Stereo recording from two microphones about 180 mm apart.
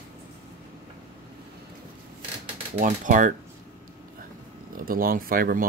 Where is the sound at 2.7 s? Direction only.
45° right (ahead or behind).